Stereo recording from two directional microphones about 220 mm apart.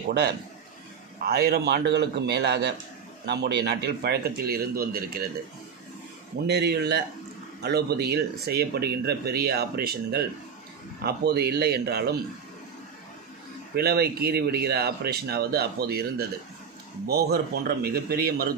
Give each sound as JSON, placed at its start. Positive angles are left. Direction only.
{"t": 1.2, "sound": "speech", "side_deg": -45}
{"t": 6.4, "sound": "speech", "side_deg": -50}
{"t": 13.7, "sound": "speech", "side_deg": -45}